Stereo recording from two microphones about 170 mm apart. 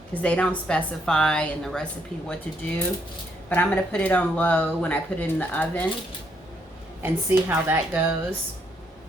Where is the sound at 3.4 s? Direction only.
10° left (ahead or behind).